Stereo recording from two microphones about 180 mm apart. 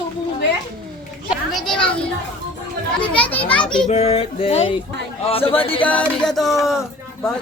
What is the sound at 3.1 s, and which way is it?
Speech, 10° left (ahead or behind).